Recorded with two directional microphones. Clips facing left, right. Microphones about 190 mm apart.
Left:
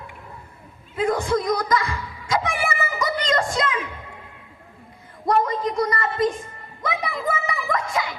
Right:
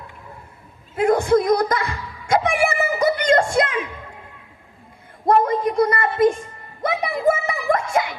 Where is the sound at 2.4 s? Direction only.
60° right (ahead or behind).